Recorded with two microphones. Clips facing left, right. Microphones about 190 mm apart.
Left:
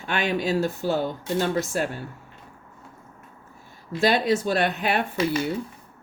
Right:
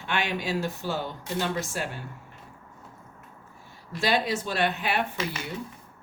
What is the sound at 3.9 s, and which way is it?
Speech, 40° left (ahead or behind).